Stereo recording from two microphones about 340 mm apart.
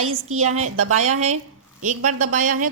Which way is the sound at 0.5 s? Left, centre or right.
Right.